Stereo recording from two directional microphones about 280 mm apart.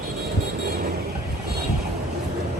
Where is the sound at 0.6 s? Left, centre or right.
Right.